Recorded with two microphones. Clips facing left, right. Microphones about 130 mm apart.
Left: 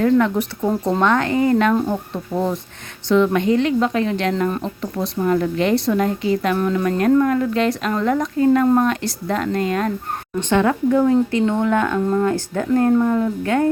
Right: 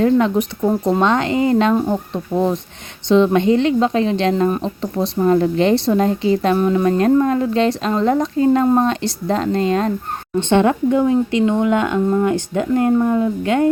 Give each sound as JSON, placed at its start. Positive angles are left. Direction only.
{"t": 0.0, "sound": "speech", "side_deg": -20}